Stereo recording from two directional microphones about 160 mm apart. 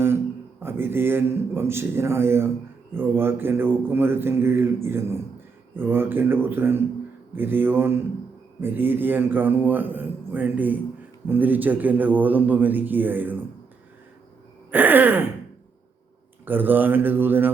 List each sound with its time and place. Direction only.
0.6 s speech: 15° right (ahead or behind)
14.7 s speech: 10° right (ahead or behind)
16.5 s speech: 10° right (ahead or behind)